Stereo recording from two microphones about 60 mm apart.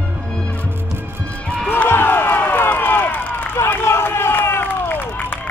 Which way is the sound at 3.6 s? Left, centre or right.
Left.